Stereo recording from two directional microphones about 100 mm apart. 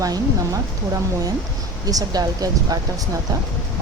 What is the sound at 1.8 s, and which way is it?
Speech, 40° right (ahead or behind).